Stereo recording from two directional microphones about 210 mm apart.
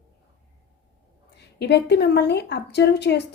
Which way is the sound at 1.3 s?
50° left (ahead or behind).